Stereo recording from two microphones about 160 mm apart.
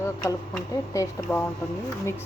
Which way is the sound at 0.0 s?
20° left (ahead or behind).